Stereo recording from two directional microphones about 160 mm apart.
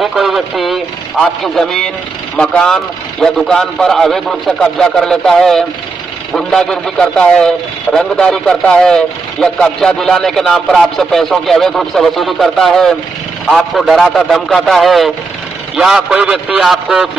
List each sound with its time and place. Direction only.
0.0 s a man's voice: centre (ahead or behind)